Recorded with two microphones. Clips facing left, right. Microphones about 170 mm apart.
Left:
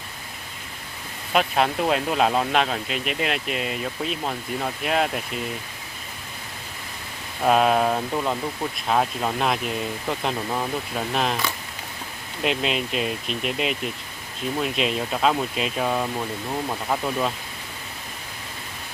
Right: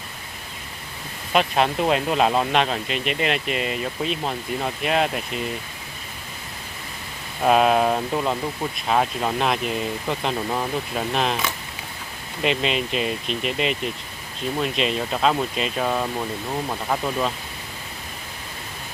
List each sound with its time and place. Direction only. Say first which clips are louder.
1.3 s speech: right 1 dB; centre (ahead or behind)
7.4 s speech: right 1 dB; centre (ahead or behind)
12.4 s speech: right 2 dB; centre (ahead or behind)